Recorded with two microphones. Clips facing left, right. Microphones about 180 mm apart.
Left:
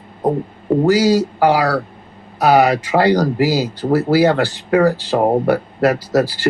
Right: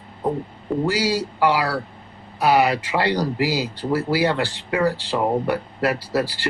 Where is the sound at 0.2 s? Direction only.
40° left (ahead or behind).